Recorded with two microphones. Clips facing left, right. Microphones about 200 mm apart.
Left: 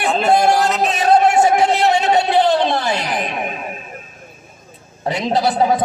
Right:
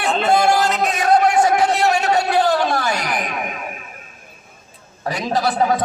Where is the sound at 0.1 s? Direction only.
Centre (ahead or behind).